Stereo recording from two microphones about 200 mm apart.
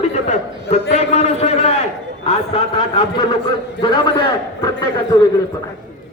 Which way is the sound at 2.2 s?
30° left (ahead or behind).